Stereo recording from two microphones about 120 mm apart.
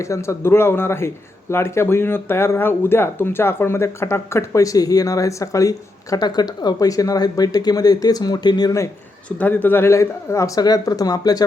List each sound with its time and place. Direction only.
0.0 s speech: 25° left (ahead or behind)
9.4 s speech: 15° left (ahead or behind); by 11.4 s 30° left (ahead or behind)